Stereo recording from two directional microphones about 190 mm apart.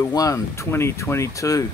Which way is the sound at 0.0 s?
20° left (ahead or behind).